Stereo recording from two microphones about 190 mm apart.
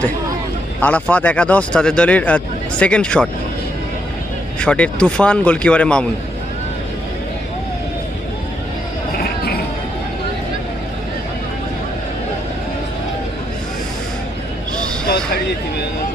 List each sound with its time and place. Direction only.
0.8 s speech: 5° left (ahead or behind)
4.6 s a man's voice: 5° left (ahead or behind)
9.1 s vehicle: 55° left (ahead or behind)
15.0 s a sound: 55° left (ahead or behind)